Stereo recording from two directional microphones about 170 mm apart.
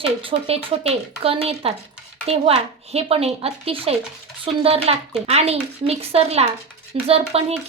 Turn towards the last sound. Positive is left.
turn(degrees=-35)  # may be behind; listen again after turning